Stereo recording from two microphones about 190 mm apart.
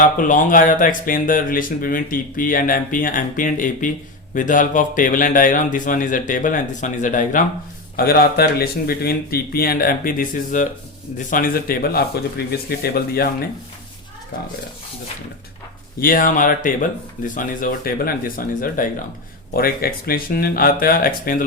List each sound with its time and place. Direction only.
0.0 s speech: 45° left (ahead or behind)
7.9 s speech: 55° left (ahead or behind)
16.0 s speech: 50° left (ahead or behind)